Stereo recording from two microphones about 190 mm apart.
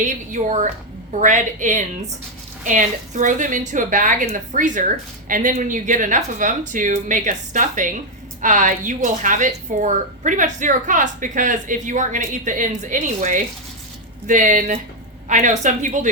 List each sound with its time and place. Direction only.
0.0 s a woman's voice: 40° right (ahead or behind)